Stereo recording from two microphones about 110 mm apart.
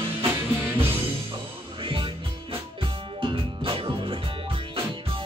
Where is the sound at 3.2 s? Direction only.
55° right (ahead or behind).